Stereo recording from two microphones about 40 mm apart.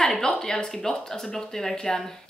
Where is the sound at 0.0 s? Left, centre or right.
Centre.